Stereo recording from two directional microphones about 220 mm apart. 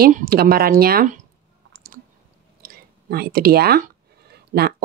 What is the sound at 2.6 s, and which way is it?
Speech, 45° right (ahead or behind).